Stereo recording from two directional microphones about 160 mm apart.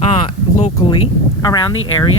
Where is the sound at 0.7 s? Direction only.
25° left (ahead or behind).